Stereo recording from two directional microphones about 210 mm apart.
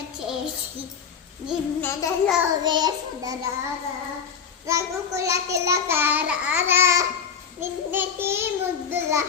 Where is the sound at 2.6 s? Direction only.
20° right (ahead or behind).